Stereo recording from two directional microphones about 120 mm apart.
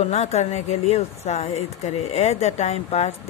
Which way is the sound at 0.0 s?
65° left (ahead or behind).